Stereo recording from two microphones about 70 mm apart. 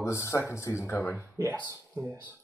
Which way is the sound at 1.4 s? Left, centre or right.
Right.